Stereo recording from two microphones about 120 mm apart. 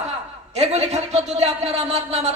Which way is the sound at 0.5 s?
65° right (ahead or behind).